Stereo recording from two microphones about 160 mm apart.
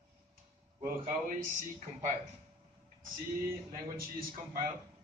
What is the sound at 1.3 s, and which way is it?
Speech, 50° right (ahead or behind).